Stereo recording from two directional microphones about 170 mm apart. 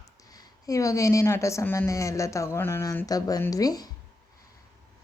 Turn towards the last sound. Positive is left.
turn(degrees=20)  # may be behind; listen again after turning